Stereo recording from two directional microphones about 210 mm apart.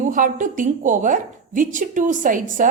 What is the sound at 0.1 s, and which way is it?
A woman's voice, 40° right (ahead or behind).